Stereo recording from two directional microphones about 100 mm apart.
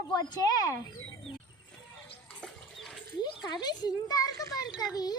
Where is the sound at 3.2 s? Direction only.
45° left (ahead or behind).